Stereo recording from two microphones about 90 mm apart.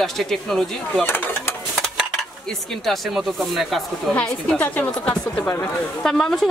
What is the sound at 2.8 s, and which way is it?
A woman's voice, centre (ahead or behind).